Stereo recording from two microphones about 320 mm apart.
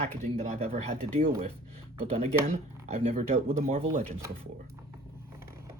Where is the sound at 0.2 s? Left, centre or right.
Right.